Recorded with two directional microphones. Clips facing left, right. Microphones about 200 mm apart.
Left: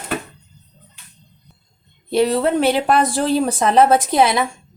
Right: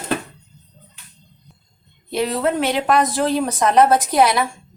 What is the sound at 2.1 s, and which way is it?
Speech, 30° left (ahead or behind).